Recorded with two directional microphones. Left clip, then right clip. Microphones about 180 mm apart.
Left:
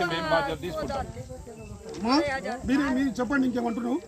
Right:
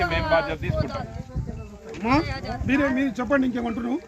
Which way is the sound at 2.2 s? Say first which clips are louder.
Left 4 dB; 75° right (ahead or behind).